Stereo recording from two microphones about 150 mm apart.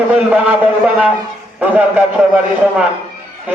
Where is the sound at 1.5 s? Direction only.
10° right (ahead or behind).